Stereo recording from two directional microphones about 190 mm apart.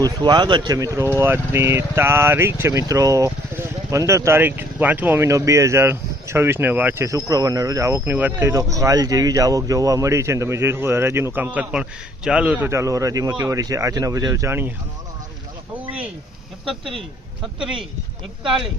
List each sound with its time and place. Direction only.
0.0 s speech: 25° right (ahead or behind)
15.7 s a sound: 5° right (ahead or behind)
16.6 s speech: centre (ahead or behind)